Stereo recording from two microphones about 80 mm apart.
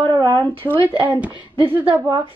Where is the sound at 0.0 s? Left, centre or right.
Right.